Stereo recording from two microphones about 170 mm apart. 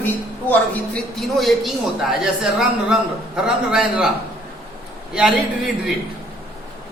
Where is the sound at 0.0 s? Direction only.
10° left (ahead or behind).